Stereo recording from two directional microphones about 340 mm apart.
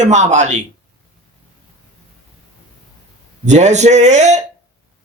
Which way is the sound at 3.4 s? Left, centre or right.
Right.